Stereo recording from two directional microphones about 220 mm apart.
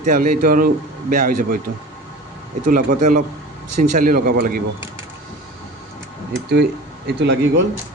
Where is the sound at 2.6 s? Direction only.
40° right (ahead or behind).